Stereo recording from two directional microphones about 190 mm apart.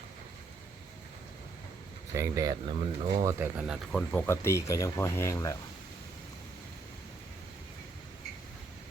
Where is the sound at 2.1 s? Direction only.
15° right (ahead or behind).